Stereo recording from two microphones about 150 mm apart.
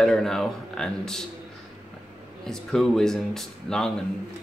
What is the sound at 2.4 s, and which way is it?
Speech, 5° left (ahead or behind).